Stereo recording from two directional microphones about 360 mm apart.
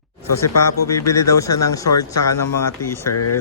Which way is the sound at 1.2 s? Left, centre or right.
Left.